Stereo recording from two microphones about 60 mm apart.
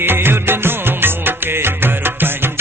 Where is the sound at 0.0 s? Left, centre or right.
Right.